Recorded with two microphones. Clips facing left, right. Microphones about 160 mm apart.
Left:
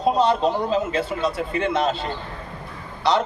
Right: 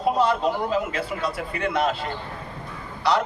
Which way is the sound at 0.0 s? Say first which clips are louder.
Left 2 dB; 25° left (ahead or behind).